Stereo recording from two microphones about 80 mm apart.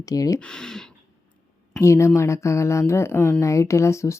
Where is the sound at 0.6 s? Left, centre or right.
Centre.